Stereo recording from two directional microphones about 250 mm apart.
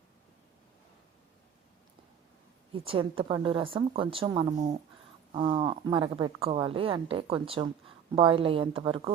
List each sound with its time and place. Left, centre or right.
2.7 s speech: right